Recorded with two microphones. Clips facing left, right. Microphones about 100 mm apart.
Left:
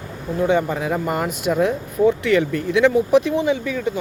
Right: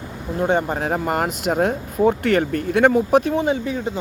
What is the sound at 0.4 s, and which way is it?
Speech, 55° right (ahead or behind).